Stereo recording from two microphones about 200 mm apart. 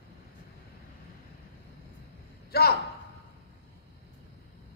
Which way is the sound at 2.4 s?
50° left (ahead or behind).